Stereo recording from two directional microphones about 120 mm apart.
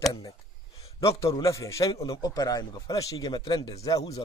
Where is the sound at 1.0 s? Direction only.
25° left (ahead or behind).